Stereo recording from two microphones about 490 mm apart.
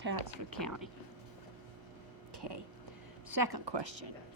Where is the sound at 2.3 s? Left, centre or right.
Right.